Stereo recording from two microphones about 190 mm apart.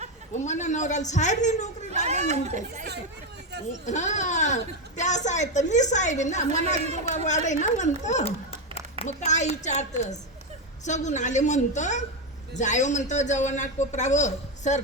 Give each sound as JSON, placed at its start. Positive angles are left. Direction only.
{"t": 0.3, "sound": "speech", "side_deg": 40}
{"t": 2.0, "sound": "speech", "side_deg": -35}
{"t": 3.7, "sound": "speech", "side_deg": 40}
{"t": 6.5, "sound": "speech", "side_deg": -35}
{"t": 7.3, "sound": "speech", "side_deg": 40}